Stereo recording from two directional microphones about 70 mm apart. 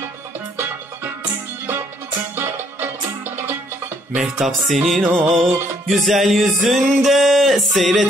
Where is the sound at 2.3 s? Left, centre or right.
Right.